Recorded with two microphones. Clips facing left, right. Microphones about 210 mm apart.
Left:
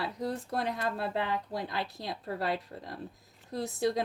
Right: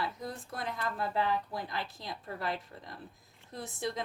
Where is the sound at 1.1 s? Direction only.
20° left (ahead or behind).